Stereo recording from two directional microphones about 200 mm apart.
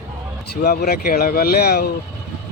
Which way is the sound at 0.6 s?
50° left (ahead or behind).